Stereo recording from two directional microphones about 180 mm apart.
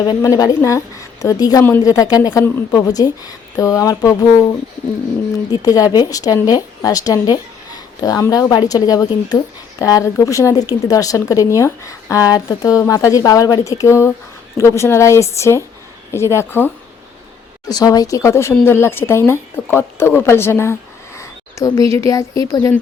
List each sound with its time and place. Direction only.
0.0 s speech: 20° left (ahead or behind)
5.5 s speech: 20° left (ahead or behind)
17.7 s speech: 20° left (ahead or behind)